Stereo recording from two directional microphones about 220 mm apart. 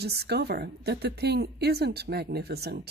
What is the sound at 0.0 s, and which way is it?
A woman's voice, 50° right (ahead or behind).